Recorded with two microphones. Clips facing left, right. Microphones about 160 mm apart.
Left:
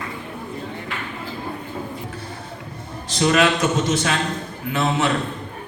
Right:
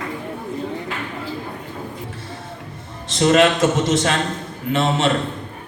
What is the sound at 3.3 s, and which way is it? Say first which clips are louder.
A man's voice: right 4 dB; 20° right (ahead or behind).